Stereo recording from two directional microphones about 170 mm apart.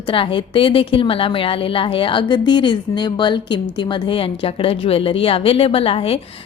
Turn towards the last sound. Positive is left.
turn(degrees=35)  # may be behind; listen again after turning